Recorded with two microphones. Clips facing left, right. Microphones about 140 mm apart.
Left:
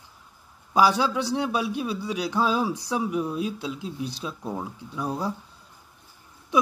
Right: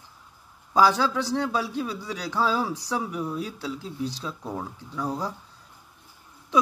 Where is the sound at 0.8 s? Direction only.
15° left (ahead or behind).